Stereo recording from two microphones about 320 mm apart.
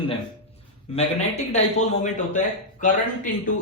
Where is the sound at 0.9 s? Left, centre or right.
Centre.